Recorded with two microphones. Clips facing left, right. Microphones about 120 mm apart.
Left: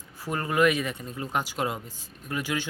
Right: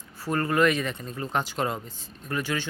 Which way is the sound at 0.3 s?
10° left (ahead or behind).